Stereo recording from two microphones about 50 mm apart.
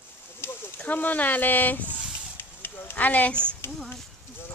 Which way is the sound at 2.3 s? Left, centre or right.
Left.